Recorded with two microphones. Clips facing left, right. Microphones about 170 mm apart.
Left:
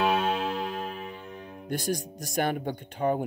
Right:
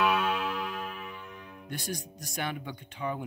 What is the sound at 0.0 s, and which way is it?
Music, 30° left (ahead or behind).